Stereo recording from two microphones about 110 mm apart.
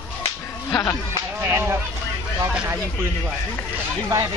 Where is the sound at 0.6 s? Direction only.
25° left (ahead or behind).